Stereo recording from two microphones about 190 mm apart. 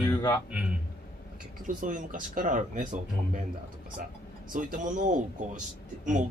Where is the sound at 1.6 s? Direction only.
45° right (ahead or behind).